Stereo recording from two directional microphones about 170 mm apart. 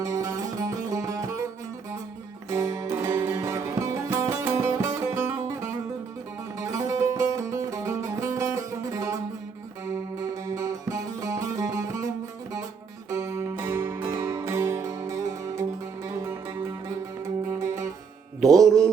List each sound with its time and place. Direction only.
0.0 s music: 20° right (ahead or behind)
2.5 s music: 15° right (ahead or behind)
18.5 s mantra: centre (ahead or behind)